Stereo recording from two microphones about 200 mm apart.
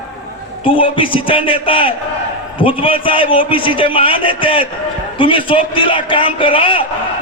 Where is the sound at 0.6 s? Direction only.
25° left (ahead or behind).